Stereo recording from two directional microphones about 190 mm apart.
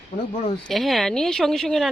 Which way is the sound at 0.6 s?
Centre (ahead or behind).